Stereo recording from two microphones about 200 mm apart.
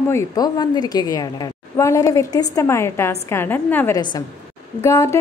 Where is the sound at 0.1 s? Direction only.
15° left (ahead or behind).